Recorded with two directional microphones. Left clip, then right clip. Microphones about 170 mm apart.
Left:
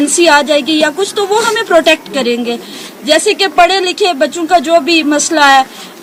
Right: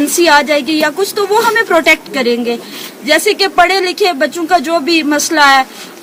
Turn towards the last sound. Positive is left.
turn(degrees=-10)  # may be behind; listen again after turning